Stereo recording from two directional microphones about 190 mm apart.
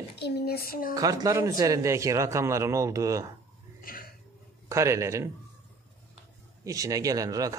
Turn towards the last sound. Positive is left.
turn(degrees=-20)  # may be behind; listen again after turning